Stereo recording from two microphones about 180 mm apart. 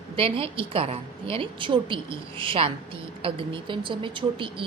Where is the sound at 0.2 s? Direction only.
30° right (ahead or behind).